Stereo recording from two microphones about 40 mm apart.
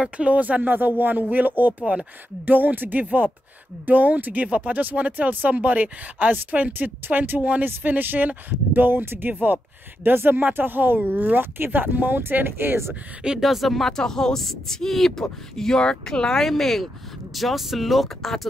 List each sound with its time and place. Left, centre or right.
0.2 s speech: right
0.7 s speech: right
1.6 s speech: right
2.4 s speech: right
4.5 s speech: right
4.7 s speech: right
12.4 s speech: right
13.4 s speech: centre